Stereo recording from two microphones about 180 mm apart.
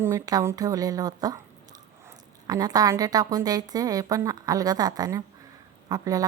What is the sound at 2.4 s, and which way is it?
A woman's voice, 20° right (ahead or behind).